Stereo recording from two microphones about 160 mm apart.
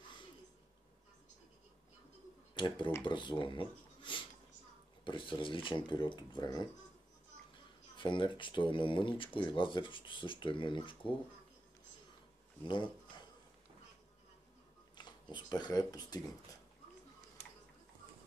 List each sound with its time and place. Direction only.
2.5 s speech: 30° left (ahead or behind)
15.0 s speech: 30° left (ahead or behind)